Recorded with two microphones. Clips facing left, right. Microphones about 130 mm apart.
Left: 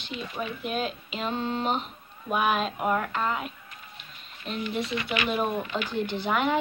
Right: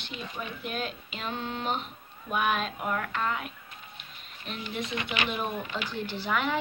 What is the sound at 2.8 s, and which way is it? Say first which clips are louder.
Speech: left 5 dB; 15° left (ahead or behind).